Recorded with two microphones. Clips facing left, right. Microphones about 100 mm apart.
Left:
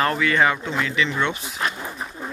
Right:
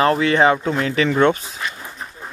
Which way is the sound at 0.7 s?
40° right (ahead or behind).